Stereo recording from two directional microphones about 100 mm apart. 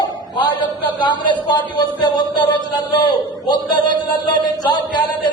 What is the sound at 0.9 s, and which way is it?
A man's voice, 50° left (ahead or behind).